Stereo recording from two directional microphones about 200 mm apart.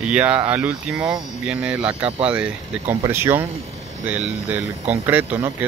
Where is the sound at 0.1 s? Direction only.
5° right (ahead or behind).